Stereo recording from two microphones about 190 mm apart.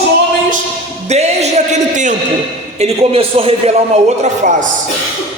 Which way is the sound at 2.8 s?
30° right (ahead or behind).